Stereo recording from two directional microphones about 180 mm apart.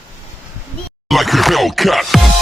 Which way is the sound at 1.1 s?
Centre (ahead or behind).